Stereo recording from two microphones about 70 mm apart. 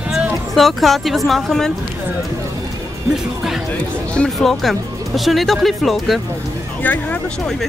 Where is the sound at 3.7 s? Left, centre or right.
Centre.